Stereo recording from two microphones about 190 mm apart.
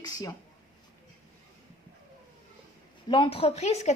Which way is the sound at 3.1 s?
30° left (ahead or behind).